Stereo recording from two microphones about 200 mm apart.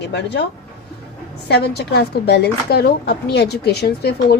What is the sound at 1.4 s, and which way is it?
Speech, 55° left (ahead or behind).